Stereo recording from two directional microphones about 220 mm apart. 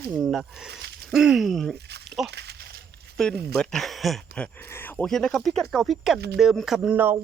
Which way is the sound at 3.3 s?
45° right (ahead or behind).